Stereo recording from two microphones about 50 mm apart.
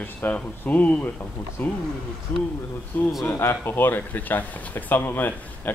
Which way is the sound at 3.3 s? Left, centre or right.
Left.